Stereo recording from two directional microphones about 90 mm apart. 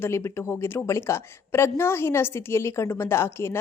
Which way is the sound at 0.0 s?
30° left (ahead or behind).